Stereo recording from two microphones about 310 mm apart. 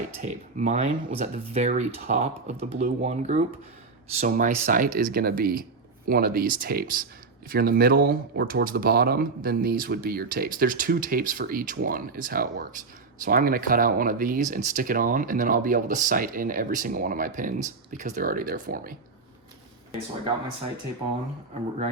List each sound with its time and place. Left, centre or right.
0.2 s speech: right